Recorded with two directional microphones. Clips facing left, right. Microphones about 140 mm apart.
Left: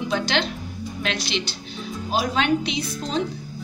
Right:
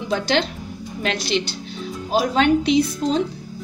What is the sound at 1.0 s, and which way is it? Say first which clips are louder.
A woman's voice: right 5 dB; 45° right (ahead or behind).